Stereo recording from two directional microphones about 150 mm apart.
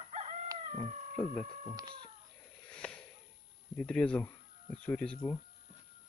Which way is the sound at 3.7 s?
5° left (ahead or behind).